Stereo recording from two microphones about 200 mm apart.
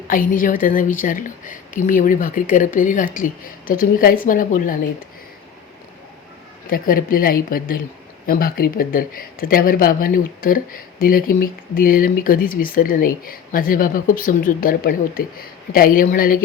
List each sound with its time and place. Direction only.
0.1 s speech: 45° left (ahead or behind)
6.7 s speech: 45° left (ahead or behind)